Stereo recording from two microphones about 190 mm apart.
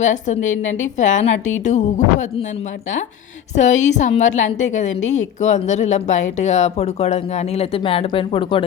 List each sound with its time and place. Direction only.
0.0 s a woman's voice: 40° left (ahead or behind)
3.5 s a woman's voice: 40° left (ahead or behind)